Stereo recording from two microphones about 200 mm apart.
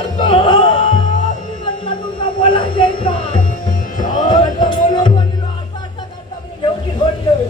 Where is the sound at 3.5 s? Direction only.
40° left (ahead or behind).